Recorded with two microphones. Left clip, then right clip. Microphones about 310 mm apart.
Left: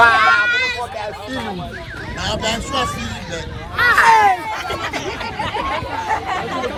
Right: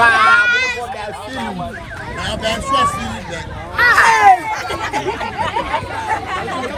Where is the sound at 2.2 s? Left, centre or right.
Centre.